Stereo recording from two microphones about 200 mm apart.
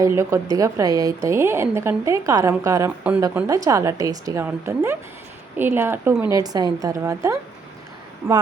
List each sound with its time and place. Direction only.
0.0 s a woman's voice: 15° right (ahead or behind)
8.2 s speech: 5° right (ahead or behind)